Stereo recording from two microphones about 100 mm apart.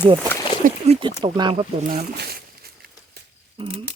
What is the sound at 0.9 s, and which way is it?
Speech, 85° right.